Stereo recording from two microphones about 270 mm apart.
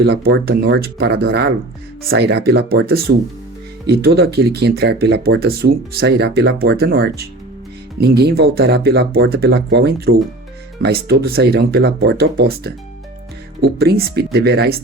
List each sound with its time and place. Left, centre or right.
0.0 s speech: right